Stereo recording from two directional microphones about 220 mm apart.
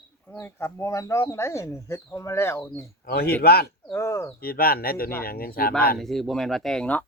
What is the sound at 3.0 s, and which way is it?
Speech, 45° left (ahead or behind).